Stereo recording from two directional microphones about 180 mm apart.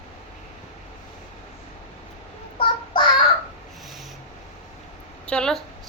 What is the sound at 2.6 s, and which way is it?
Child singing, 25° left (ahead or behind).